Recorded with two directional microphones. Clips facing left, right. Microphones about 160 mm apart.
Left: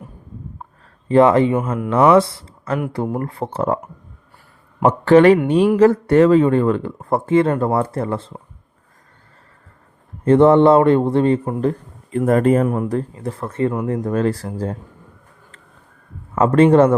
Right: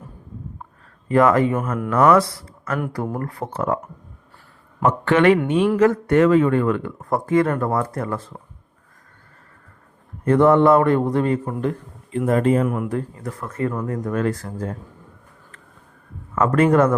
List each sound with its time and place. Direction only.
1.0 s a man's voice: 30° left (ahead or behind)
1.5 s speech: 10° left (ahead or behind)
2.1 s a man's voice: 25° left (ahead or behind)
4.8 s a man's voice: 35° left (ahead or behind)
10.2 s a man's voice: 25° left (ahead or behind)
11.6 s a sound: 35° left (ahead or behind)
12.2 s speech: 50° left (ahead or behind)
12.6 s a man's voice: 30° left (ahead or behind)
16.4 s a man's voice: 30° left (ahead or behind)